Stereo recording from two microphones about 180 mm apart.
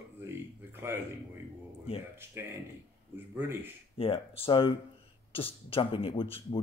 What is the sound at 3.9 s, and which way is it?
Speech, 30° left (ahead or behind).